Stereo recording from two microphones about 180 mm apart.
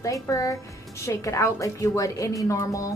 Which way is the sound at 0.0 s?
20° left (ahead or behind).